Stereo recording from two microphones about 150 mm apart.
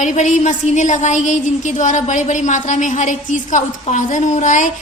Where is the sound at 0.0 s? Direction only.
55° left (ahead or behind).